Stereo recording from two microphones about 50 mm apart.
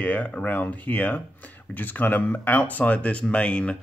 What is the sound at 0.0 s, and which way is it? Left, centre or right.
Speech, left.